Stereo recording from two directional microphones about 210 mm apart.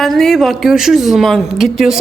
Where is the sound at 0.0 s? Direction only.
Centre (ahead or behind).